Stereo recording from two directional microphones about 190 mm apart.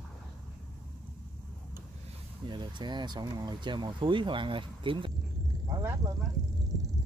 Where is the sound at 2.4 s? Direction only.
25° right (ahead or behind).